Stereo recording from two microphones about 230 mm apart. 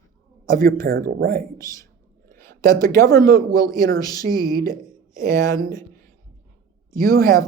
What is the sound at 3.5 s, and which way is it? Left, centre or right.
Speech, right.